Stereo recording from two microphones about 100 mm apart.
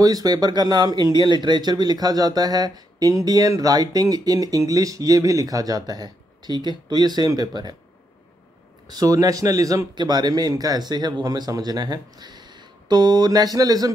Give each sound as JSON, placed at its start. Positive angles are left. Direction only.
{"t": 0.0, "sound": "speech", "side_deg": -40}
{"t": 8.8, "sound": "speech", "side_deg": -40}